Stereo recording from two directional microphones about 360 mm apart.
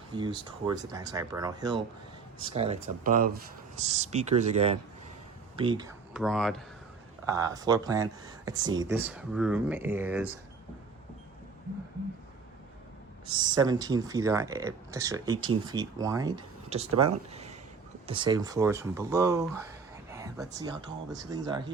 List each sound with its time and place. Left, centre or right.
0.1 s speech: centre
6.1 s speech: centre
7.3 s speech: centre
13.6 s speech: centre
16.9 s speech: right
17.3 s a sound: centre
18.0 s speech: centre
20.1 s a sound: centre
20.6 s speech: centre